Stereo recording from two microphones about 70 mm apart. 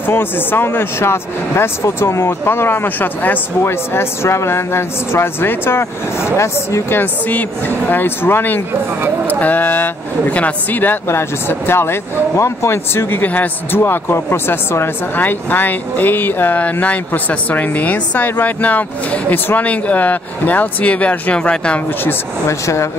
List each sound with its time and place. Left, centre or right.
0.0 s speech: left
3.6 s speech: left; by 21.8 s centre
22.5 s speech: left